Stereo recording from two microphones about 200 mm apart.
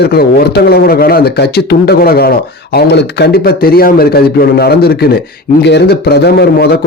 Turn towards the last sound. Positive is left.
turn(degrees=55)  # may be behind; listen again after turning